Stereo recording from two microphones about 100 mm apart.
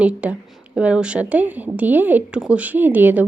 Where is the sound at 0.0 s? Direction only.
15° right (ahead or behind).